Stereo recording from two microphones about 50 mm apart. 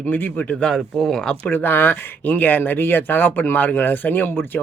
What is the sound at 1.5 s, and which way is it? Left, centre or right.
Speech, left.